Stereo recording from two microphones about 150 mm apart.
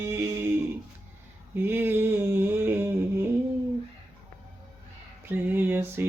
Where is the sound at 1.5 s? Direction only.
15° right (ahead or behind).